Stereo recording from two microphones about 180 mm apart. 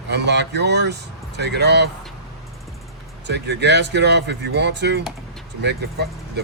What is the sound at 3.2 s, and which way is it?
Speech, 70° right (ahead or behind).